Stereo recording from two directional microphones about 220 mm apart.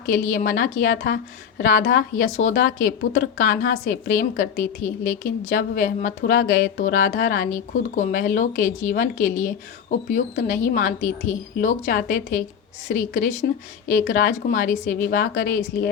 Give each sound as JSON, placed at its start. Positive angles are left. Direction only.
{"t": 0.1, "sound": "a woman's voice", "side_deg": 40}